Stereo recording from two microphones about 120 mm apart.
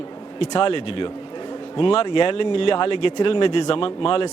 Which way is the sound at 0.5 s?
45° left (ahead or behind).